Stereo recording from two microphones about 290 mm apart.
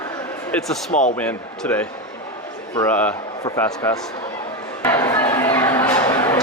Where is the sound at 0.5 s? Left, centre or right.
Centre.